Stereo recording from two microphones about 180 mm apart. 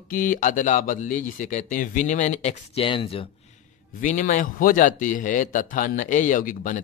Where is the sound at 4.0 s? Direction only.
45° left (ahead or behind).